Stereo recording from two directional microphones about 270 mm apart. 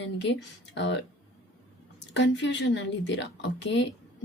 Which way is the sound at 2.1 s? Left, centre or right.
Left.